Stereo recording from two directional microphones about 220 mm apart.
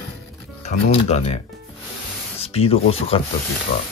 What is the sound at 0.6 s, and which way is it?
Speech, 30° left (ahead or behind).